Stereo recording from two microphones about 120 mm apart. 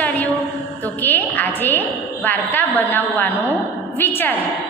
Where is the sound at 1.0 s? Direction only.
15° left (ahead or behind).